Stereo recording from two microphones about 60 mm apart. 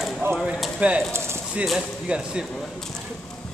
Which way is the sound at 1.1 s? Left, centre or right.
Right.